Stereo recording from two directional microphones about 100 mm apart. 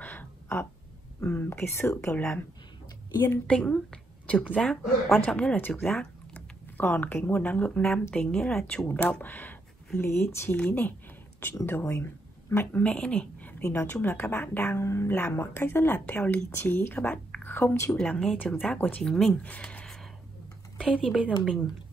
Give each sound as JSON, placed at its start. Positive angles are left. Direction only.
{"t": 0.0, "sound": "a sound", "side_deg": 20}
{"t": 1.2, "sound": "speech", "side_deg": 25}
{"t": 2.1, "sound": "speech", "side_deg": 15}
{"t": 3.4, "sound": "a woman's voice", "side_deg": 10}
{"t": 5.8, "sound": "a sound", "side_deg": 5}
{"t": 6.8, "sound": "speech", "side_deg": 20}
{"t": 10.5, "sound": "speech", "side_deg": 10}
{"t": 17.9, "sound": "speech", "side_deg": 10}
{"t": 18.8, "sound": "speech", "side_deg": 20}
{"t": 19.0, "sound": "speech", "side_deg": 5}